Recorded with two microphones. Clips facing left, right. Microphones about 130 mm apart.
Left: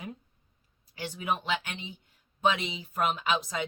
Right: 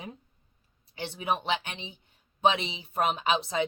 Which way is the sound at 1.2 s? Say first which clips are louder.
Right 2 dB; 25° right (ahead or behind).